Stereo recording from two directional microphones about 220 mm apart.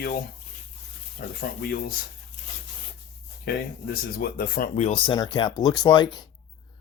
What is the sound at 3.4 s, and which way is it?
Speech, 45° left (ahead or behind).